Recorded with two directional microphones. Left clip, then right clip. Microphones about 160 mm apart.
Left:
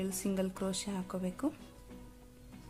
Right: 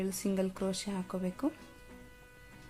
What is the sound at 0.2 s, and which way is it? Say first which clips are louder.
Speech: right 2 dB; 15° right (ahead or behind).